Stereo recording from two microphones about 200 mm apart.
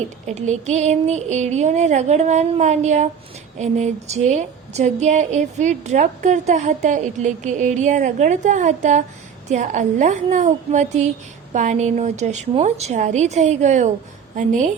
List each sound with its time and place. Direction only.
0.3 s a woman's voice: 35° right (ahead or behind)